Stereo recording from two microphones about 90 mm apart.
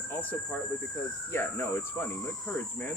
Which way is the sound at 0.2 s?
20° left (ahead or behind).